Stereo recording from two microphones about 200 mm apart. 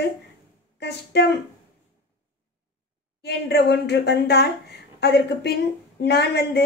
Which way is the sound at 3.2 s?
55° left (ahead or behind).